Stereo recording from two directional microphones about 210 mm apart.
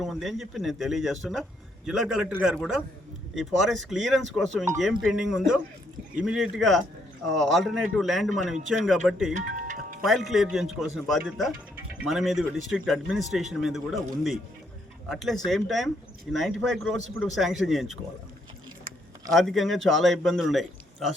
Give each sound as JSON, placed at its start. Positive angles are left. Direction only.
{"t": 0.0, "sound": "a man's voice", "side_deg": 0}
{"t": 9.3, "sound": "tick-tock", "side_deg": -40}
{"t": 10.0, "sound": "a man's voice", "side_deg": 0}
{"t": 19.3, "sound": "a man's voice", "side_deg": 0}